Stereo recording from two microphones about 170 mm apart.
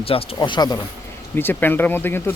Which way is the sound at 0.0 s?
35° left (ahead or behind).